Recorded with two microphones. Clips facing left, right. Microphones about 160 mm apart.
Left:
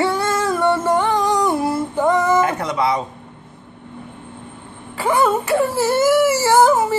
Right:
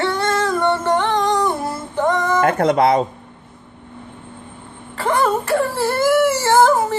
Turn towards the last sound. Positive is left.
turn(degrees=5)  # may be behind; listen again after turning